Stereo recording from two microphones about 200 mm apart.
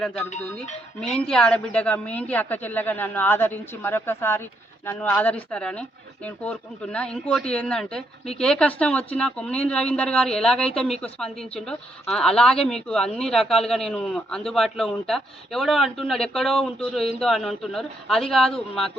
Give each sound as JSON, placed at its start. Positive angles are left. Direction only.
{"t": 0.0, "sound": "speech", "side_deg": 5}
{"t": 0.6, "sound": "speech", "side_deg": 35}
{"t": 1.1, "sound": "a woman's voice", "side_deg": 5}